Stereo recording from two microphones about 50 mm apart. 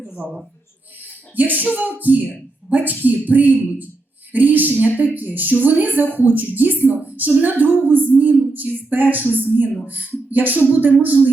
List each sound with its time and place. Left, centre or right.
0.2 s speech: right
1.4 s speech: right